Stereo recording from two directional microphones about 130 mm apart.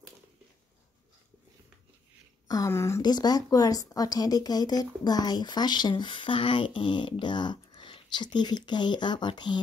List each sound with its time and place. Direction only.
2.4 s speech: 25° left (ahead or behind)
3.0 s speech: 30° left (ahead or behind)